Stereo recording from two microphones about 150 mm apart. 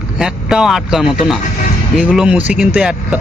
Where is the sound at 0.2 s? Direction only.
5° right (ahead or behind).